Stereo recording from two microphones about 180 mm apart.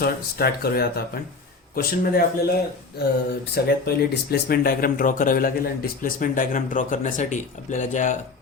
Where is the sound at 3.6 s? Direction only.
60° left (ahead or behind).